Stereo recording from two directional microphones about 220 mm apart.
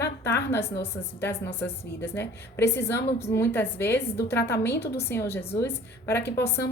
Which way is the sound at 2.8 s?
10° left (ahead or behind).